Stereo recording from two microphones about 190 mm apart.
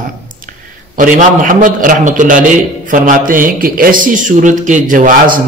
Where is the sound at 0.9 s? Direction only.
40° right (ahead or behind).